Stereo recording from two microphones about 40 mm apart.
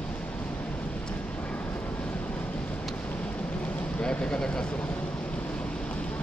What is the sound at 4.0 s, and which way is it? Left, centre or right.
Vehicle, left.